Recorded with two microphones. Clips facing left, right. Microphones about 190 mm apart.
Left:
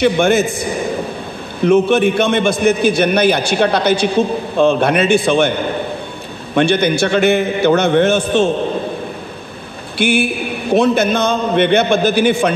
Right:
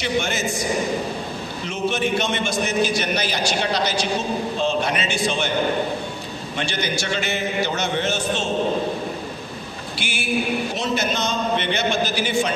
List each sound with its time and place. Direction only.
0.0 s a man's voice: 55° left (ahead or behind)
6.5 s a man's voice: 55° left (ahead or behind)
9.9 s a man's voice: 55° left (ahead or behind)